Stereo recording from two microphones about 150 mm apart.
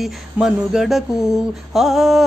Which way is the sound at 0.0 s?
5° right (ahead or behind).